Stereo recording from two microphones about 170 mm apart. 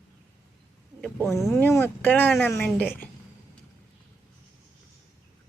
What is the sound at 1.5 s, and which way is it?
Speech, 15° left (ahead or behind).